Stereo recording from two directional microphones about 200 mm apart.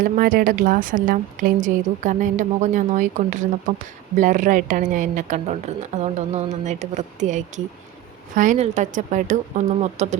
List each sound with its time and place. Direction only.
0.0 s a woman's voice: 45° right (ahead or behind)